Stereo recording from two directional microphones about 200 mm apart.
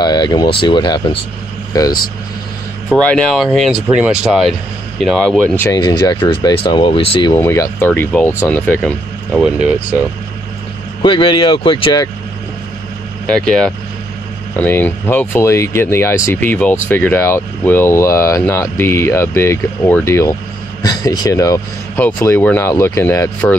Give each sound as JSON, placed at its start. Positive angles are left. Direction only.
{"t": 0.0, "sound": "speech", "side_deg": 20}
{"t": 2.9, "sound": "speech", "side_deg": 5}
{"t": 5.7, "sound": "speech", "side_deg": 20}
{"t": 7.3, "sound": "speech", "side_deg": 15}
{"t": 11.0, "sound": "speech", "side_deg": 25}
{"t": 14.6, "sound": "speech", "side_deg": 10}